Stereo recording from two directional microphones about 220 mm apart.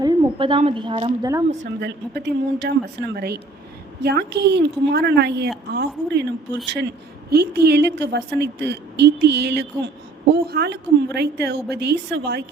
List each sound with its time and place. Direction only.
0.0 s a woman's voice: 25° right (ahead or behind)
1.8 s speech: 50° right (ahead or behind)